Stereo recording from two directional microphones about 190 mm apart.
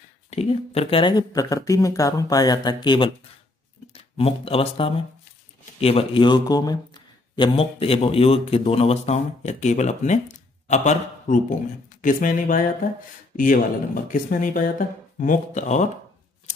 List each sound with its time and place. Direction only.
0.3 s speech: 30° left (ahead or behind)